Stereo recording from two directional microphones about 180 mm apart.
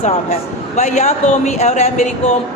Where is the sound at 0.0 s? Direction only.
35° left (ahead or behind).